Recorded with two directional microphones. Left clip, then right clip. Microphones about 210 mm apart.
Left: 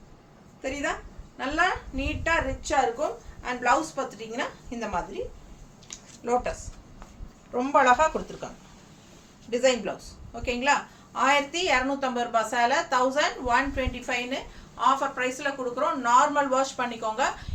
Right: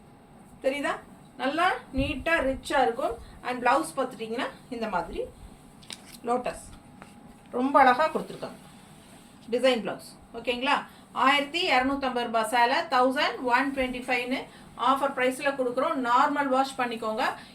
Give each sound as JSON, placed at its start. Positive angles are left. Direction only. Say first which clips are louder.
{"t": 0.6, "sound": "a sound", "louder": "right 2 dB", "side_deg": 15}
{"t": 1.4, "sound": "a woman's voice", "louder": "even", "side_deg": 15}
{"t": 6.2, "sound": "a woman's voice", "louder": "left 2 dB", "side_deg": 15}
{"t": 7.5, "sound": "a woman's voice", "louder": "even", "side_deg": 15}
{"t": 9.5, "sound": "a woman's voice", "louder": "left 1 dB", "side_deg": 15}